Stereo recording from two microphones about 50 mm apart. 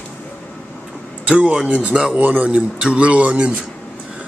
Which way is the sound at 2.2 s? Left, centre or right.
Right.